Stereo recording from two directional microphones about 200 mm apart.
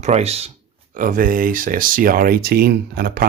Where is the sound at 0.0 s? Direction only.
30° right (ahead or behind).